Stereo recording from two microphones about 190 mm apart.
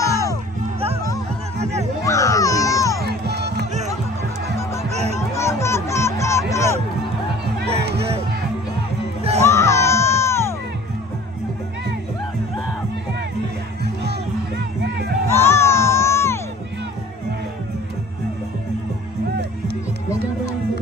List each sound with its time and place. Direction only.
0.0 s music: 15° left (ahead or behind)
2.0 s baby cry: 15° left (ahead or behind)
3.0 s music: 60° right (ahead or behind)
5.3 s music: 15° left (ahead or behind)
6.5 s a sound: 15° left (ahead or behind)
7.5 s music: 60° right (ahead or behind)
9.4 s music: 15° left (ahead or behind)
14.8 s music: 60° right (ahead or behind)
15.4 s music: 15° left (ahead or behind)